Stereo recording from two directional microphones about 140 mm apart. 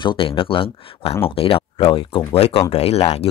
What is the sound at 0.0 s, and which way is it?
Speech, 40° left (ahead or behind).